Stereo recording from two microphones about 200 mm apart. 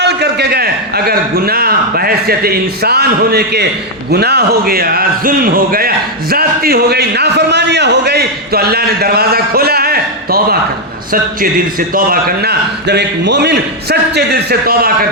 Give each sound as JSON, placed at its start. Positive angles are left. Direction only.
{"t": 0.0, "sound": "a man's voice", "side_deg": -55}
{"t": 11.9, "sound": "a man's voice", "side_deg": -45}